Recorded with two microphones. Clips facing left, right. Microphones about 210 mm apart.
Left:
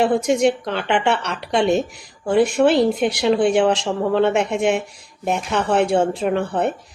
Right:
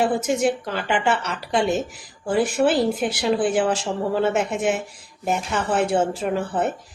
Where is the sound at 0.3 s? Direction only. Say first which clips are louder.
Left 4 dB; 5° right (ahead or behind).